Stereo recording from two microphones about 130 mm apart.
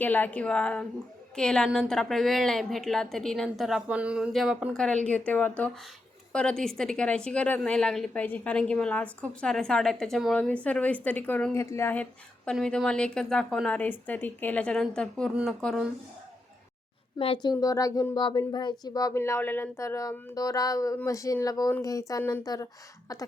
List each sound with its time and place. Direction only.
0.0 s a woman's voice: 10° left (ahead or behind)
5.0 s a woman's voice: 10° left (ahead or behind)
11.5 s speech: 20° left (ahead or behind)
12.5 s a woman's voice: 5° left (ahead or behind)
17.2 s speech: 45° left (ahead or behind)
17.4 s speech: 30° left (ahead or behind)